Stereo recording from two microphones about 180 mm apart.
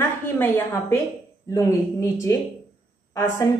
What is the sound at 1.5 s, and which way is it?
A woman's voice, 15° left (ahead or behind).